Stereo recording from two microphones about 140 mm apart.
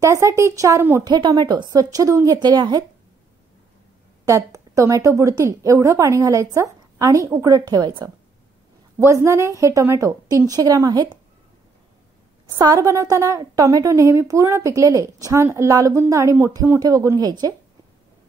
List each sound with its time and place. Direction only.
0.0 s a woman's voice: 20° right (ahead or behind)
1.0 s a woman's voice: 30° right (ahead or behind)
4.3 s a woman's voice: 20° right (ahead or behind)
12.4 s a woman's voice: 25° right (ahead or behind)